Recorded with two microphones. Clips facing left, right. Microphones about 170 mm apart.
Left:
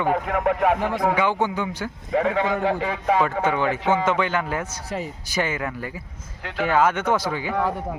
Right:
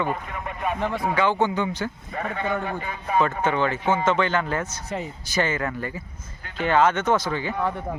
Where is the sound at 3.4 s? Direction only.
10° left (ahead or behind).